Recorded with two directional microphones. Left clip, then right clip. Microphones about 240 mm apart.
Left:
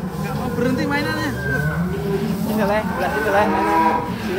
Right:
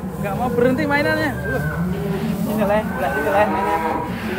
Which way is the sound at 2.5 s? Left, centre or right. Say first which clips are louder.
Right 1 dB; left.